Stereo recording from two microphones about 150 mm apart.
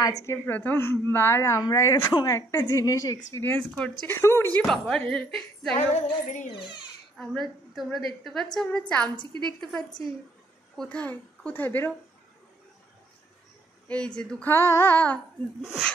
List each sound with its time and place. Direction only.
0.2 s a woman's voice: 15° left (ahead or behind)
5.8 s female singing: 55° left (ahead or behind)
6.6 s a child's voice: 30° left (ahead or behind)
7.2 s a woman's voice: centre (ahead or behind)
13.8 s a woman's voice: 5° left (ahead or behind)
15.6 s a woman's voice: centre (ahead or behind)